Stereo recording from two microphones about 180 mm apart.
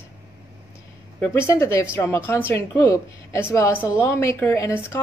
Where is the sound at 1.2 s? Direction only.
15° left (ahead or behind).